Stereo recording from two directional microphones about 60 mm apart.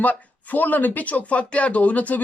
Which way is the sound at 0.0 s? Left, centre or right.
Left.